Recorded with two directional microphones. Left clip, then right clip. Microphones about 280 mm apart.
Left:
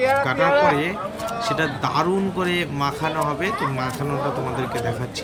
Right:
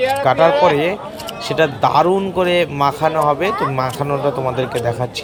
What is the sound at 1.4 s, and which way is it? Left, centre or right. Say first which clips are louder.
Speech: right 8 dB; centre.